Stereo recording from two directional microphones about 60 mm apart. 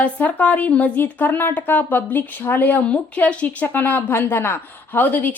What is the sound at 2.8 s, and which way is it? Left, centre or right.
Speech, left.